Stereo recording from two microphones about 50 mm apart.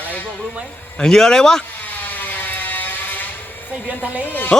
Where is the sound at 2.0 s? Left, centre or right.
Left.